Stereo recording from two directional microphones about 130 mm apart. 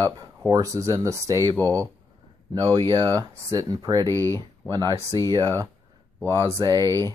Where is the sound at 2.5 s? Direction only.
30° right (ahead or behind).